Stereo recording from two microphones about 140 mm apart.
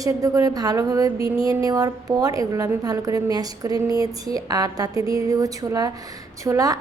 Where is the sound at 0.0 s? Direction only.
25° right (ahead or behind).